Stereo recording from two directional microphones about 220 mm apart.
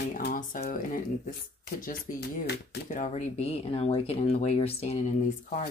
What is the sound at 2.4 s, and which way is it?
Speech, 40° left (ahead or behind).